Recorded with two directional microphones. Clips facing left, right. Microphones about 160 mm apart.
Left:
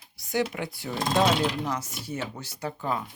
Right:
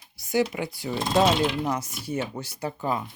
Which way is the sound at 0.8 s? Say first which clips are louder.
Right 2 dB; 15° right (ahead or behind).